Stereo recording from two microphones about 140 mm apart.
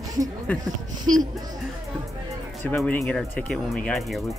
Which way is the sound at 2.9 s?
5° left (ahead or behind).